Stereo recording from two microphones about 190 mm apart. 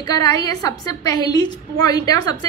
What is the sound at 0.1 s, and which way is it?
A woman's voice, 20° left (ahead or behind).